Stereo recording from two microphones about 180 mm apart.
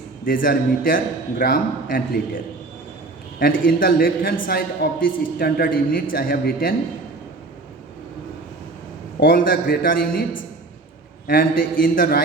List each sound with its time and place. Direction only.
0.3 s a woman's voice: 50° left (ahead or behind)
3.6 s a woman's voice: 55° left (ahead or behind)
9.2 s a woman's voice: 55° left (ahead or behind)
11.3 s a woman's voice: 50° left (ahead or behind)